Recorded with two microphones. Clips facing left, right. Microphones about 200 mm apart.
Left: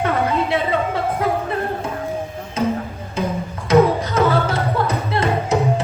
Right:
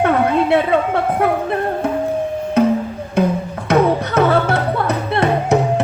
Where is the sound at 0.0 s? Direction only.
60° right (ahead or behind).